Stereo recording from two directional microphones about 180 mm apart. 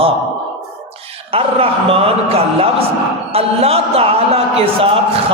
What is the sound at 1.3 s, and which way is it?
A man's voice, 30° right (ahead or behind).